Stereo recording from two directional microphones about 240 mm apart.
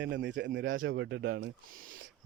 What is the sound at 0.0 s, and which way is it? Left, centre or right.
Speech, right.